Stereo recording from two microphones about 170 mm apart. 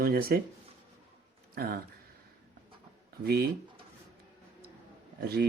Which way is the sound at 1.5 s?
60° right (ahead or behind).